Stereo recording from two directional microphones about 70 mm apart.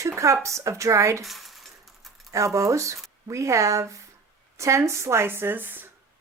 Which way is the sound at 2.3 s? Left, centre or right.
Right.